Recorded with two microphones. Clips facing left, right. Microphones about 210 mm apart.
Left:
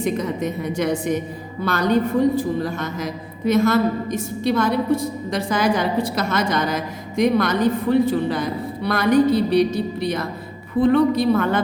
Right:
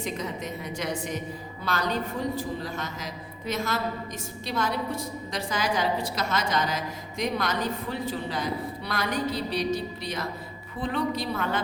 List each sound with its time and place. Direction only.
0.0 s a woman's voice: 60° left (ahead or behind)